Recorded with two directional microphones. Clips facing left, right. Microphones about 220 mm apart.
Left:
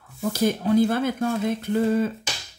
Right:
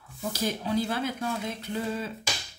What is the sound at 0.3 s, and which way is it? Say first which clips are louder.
Speech: left 8 dB; 50° left (ahead or behind).